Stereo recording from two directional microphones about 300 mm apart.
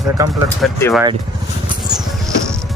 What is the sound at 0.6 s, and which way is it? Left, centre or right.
Speech, centre.